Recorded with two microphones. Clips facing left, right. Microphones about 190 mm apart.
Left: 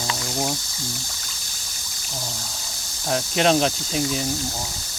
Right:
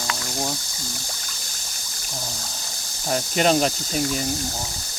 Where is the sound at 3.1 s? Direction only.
Centre (ahead or behind).